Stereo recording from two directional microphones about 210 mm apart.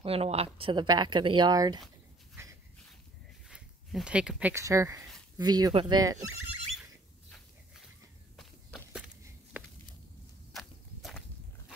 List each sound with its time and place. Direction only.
0.0 s speech: 30° right (ahead or behind)
2.4 s dog: 10° right (ahead or behind)
3.4 s speech: 5° right (ahead or behind); by 6.1 s 20° right (ahead or behind)
8.4 s walk: centre (ahead or behind)
10.5 s walk: centre (ahead or behind)